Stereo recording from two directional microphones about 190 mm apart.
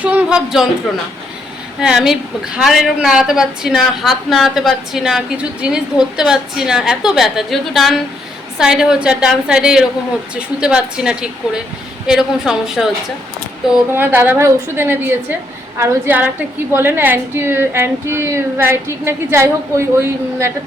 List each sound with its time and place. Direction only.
0.0 s a man's voice: 5° right (ahead or behind)
1.8 s a woman's voice: 5° right (ahead or behind)
13.9 s speech: 10° right (ahead or behind)